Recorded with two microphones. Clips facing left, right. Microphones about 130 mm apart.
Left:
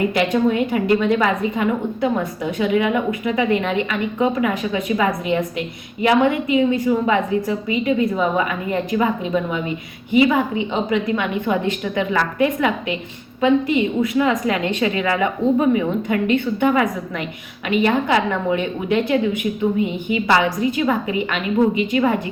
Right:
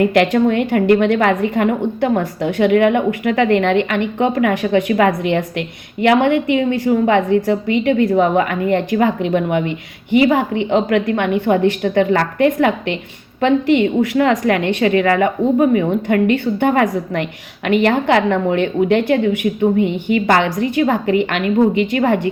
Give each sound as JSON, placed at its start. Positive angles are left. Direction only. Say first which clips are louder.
{"t": 0.0, "sound": "a woman's voice", "louder": "right 4 dB", "side_deg": -55}
{"t": 11.1, "sound": "a woman's voice", "louder": "right 5 dB", "side_deg": -55}
{"t": 13.4, "sound": "a woman's voice", "louder": "right 3 dB", "side_deg": -75}
{"t": 17.7, "sound": "a woman's voice", "louder": "right 4 dB", "side_deg": -70}